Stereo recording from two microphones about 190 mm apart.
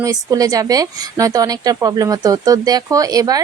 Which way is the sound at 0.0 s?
20° right (ahead or behind).